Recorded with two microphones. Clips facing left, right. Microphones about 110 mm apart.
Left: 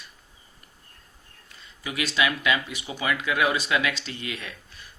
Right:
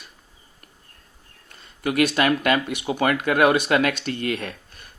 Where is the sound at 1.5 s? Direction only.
50° right (ahead or behind).